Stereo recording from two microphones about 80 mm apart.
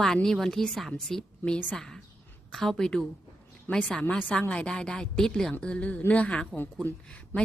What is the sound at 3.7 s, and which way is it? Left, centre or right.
A woman's voice, left.